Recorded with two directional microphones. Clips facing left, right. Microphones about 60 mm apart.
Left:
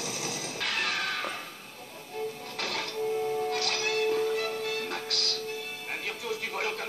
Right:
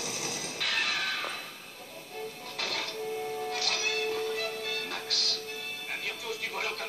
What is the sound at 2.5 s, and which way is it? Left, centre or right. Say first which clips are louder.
Music: left 1 dB; left.